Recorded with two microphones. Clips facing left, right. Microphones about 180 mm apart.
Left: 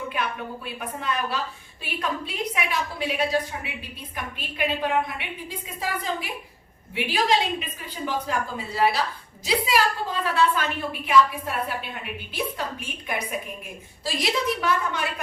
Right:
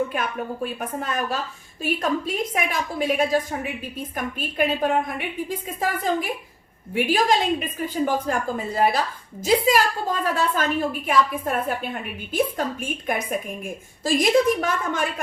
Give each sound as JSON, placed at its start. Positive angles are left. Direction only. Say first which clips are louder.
{"t": 0.1, "sound": "a woman's voice", "louder": "right 3 dB", "side_deg": -45}